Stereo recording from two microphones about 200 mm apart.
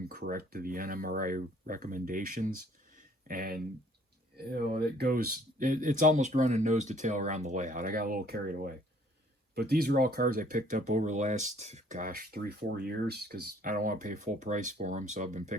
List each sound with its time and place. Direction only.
0.0 s speech: 50° right (ahead or behind)
2.9 s a sound: 45° right (ahead or behind)
4.4 s speech: 50° right (ahead or behind)